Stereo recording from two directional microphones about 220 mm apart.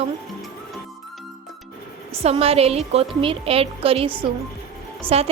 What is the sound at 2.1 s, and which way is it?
A woman's voice, 25° right (ahead or behind).